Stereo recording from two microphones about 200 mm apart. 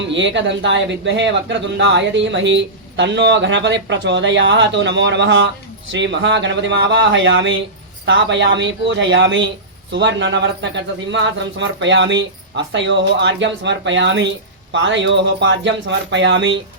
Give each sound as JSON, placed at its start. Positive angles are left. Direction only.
{"t": 0.0, "sound": "speech", "side_deg": -65}